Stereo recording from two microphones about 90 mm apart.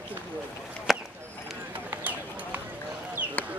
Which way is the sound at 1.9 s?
20° right (ahead or behind).